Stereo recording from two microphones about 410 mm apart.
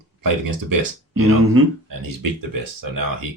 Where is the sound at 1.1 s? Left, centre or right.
Right.